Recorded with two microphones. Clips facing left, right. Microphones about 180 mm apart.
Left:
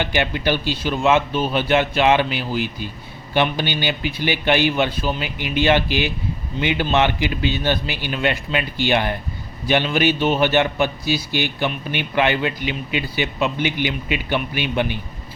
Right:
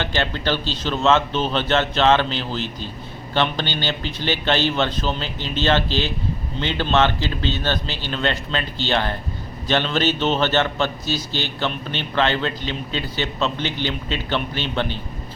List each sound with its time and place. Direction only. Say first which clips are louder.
0.0 s a man's voice: left 2 dB; 15° left (ahead or behind)